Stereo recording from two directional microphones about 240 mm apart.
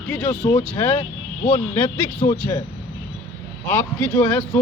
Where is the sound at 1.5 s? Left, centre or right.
Centre.